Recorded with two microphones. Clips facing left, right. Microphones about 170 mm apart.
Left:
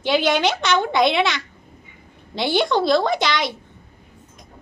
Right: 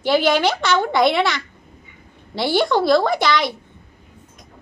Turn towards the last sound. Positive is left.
turn(degrees=20)  # may be behind; listen again after turning